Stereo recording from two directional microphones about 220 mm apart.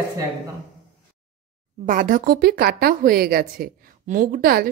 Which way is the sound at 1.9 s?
40° right (ahead or behind).